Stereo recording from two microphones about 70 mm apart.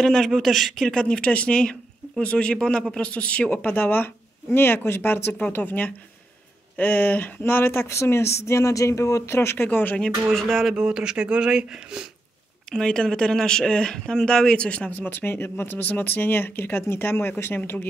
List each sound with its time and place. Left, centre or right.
0.0 s speech: centre; by 9.7 s left
9.7 s speech: left
10.3 s a sound: centre
10.8 s speech: centre
12.7 s speech: centre; by 17.8 s left